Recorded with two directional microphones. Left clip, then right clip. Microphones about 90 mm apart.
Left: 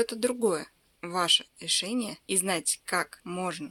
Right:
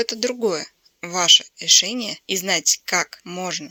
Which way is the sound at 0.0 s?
15° right (ahead or behind).